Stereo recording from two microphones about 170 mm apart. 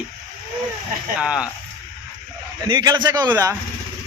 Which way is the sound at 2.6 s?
25° right (ahead or behind).